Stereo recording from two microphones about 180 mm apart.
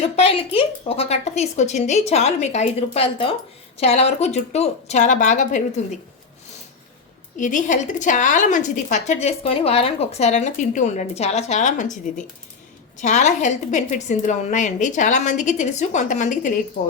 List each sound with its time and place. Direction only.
0.2 s a woman's voice: 35° left (ahead or behind)
7.3 s a woman's voice: 45° left (ahead or behind)